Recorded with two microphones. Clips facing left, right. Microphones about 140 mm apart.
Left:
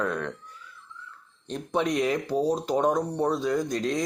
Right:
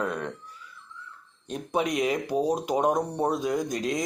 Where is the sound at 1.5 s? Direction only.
10° right (ahead or behind).